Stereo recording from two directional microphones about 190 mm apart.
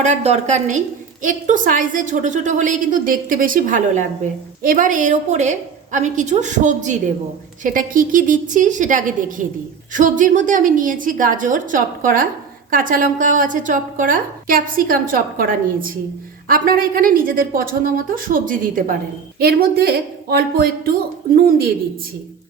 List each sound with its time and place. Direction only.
0.0 s a woman's voice: 35° right (ahead or behind)
16.5 s a woman's voice: 50° right (ahead or behind)